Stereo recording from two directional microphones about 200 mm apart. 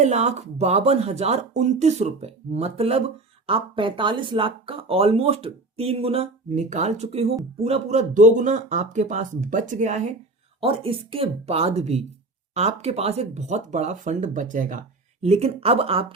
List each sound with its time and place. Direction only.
0.0 s speech: 35° right (ahead or behind)